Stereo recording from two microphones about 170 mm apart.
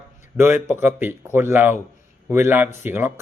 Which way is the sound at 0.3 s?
15° right (ahead or behind).